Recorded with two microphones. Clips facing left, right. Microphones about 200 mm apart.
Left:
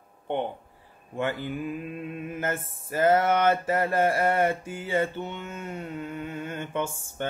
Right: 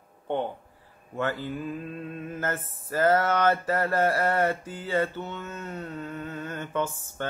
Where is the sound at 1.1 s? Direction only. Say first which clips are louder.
Even; 15° left (ahead or behind).